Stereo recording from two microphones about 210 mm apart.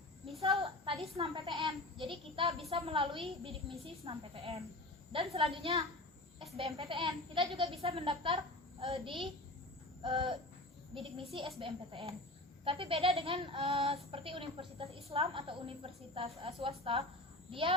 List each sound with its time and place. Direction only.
0.4 s a child's voice: 25° right (ahead or behind)
11.3 s speech: 25° right (ahead or behind)